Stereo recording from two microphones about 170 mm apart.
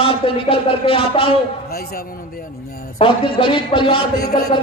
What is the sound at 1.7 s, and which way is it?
A man's voice, 65° left (ahead or behind).